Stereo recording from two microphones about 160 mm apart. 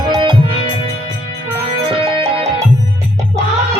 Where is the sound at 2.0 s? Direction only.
40° right (ahead or behind).